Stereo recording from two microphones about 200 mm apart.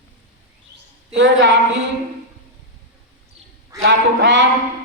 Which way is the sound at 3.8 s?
60° right (ahead or behind).